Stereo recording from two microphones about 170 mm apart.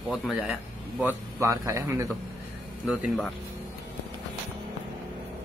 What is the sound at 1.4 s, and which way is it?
Speech, 20° right (ahead or behind).